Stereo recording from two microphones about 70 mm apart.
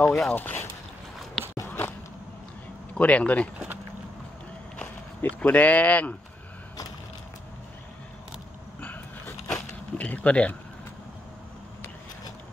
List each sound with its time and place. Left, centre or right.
0.0 s speech: centre
0.3 s speech: left
1.4 s biting: centre
2.9 s speech: centre
5.2 s speech: left
9.9 s speech: left